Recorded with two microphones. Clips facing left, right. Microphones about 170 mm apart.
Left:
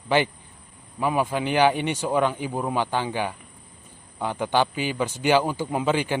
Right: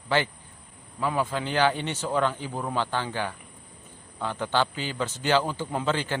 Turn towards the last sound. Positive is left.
turn(degrees=10)  # may be behind; listen again after turning